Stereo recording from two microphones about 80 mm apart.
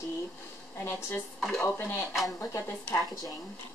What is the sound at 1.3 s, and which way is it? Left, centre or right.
Speech, centre.